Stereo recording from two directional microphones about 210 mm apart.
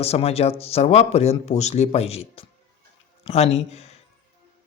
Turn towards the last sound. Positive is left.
turn(degrees=30)  # may be behind; listen again after turning